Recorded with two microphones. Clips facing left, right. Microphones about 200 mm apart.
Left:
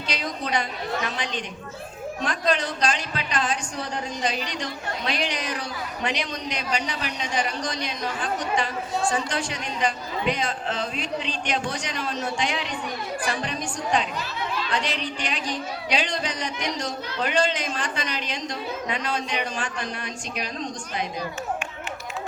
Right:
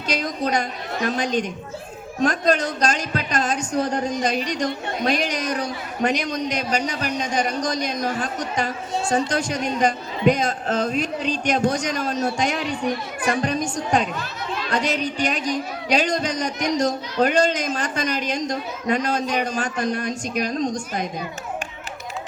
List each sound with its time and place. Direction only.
0.1 s speech: 45° right (ahead or behind)